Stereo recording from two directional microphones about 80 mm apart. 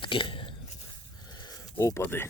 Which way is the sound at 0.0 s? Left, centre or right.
Left.